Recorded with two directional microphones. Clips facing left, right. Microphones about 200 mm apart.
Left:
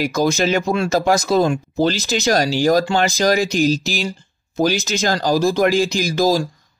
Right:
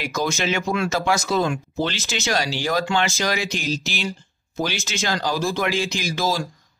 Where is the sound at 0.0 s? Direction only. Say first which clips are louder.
Left 7 dB; 35° left (ahead or behind).